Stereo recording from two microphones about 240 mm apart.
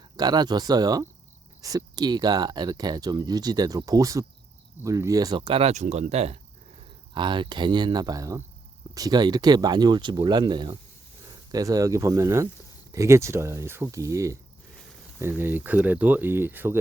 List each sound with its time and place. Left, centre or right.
0.2 s speech: centre